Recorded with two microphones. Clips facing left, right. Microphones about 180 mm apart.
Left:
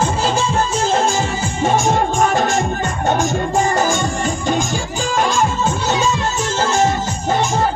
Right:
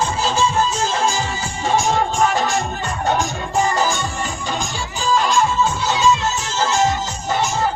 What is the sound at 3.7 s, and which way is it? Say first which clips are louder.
Music: left 3 dB; 50° left (ahead or behind).